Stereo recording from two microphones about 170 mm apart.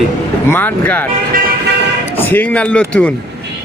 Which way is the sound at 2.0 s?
10° left (ahead or behind).